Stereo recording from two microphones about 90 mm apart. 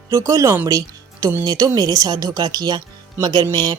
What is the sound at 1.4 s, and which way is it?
Speech, 45° right (ahead or behind).